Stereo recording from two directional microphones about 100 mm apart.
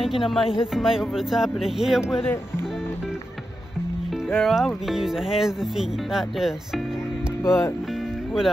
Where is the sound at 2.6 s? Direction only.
5° right (ahead or behind).